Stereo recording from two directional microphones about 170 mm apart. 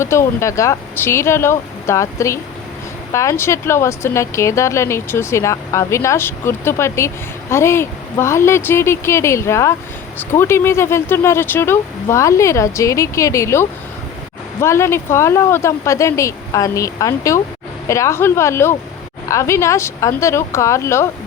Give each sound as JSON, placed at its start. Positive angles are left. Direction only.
{"t": 0.0, "sound": "speech", "side_deg": 15}